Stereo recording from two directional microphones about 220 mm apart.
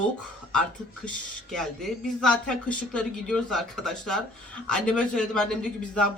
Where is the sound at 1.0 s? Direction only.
Centre (ahead or behind).